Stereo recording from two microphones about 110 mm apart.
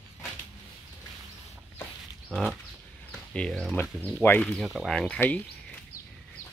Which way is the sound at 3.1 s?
10° left (ahead or behind).